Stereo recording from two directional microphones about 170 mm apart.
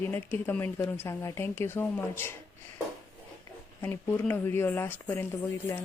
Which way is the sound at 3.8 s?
10° left (ahead or behind).